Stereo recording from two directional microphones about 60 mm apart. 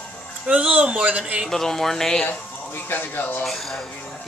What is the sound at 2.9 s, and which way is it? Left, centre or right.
Speech, left.